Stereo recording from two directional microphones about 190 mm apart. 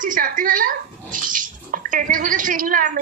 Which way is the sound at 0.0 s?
45° right (ahead or behind).